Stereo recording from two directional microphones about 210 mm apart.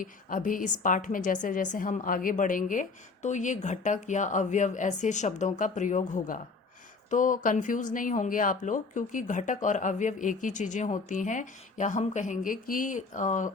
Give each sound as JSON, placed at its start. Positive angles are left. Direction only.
{"t": 0.0, "sound": "speech", "side_deg": 40}